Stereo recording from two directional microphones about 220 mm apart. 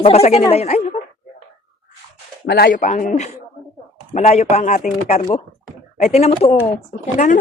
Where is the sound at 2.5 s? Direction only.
45° left (ahead or behind).